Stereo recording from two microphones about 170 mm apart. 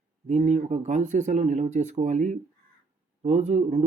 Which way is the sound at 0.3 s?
45° right (ahead or behind).